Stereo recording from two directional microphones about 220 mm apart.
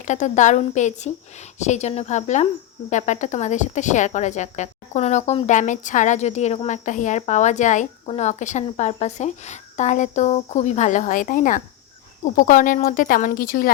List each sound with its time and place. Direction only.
0.0 s speech: 35° left (ahead or behind)